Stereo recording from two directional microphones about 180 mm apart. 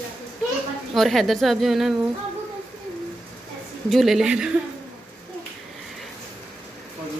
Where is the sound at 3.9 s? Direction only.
Centre (ahead or behind).